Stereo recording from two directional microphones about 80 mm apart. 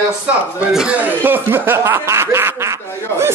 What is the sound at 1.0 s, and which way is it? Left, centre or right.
Speech, right.